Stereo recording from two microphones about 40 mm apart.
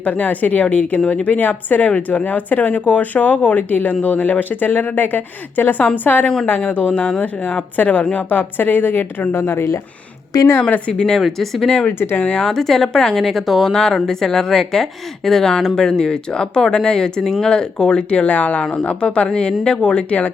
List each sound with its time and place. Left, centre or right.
0.0 s speech: left
6.2 s speech: left
6.7 s speech: left
8.3 s a woman's voice: left
9.3 s speech: left
10.6 s speech: left
11.3 s a woman's voice: centre
12.2 s speech: left
12.5 s a woman's voice: centre
13.7 s a woman's voice: centre; by 20.3 s left